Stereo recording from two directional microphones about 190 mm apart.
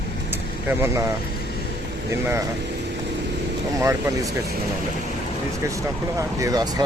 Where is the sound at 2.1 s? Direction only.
15° right (ahead or behind).